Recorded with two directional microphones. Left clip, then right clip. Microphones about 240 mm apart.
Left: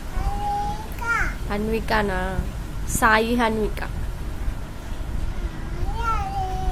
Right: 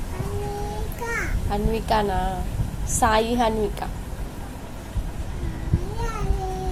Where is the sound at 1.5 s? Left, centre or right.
Centre.